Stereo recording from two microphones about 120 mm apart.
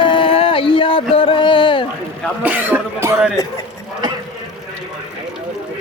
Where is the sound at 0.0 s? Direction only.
45° left (ahead or behind).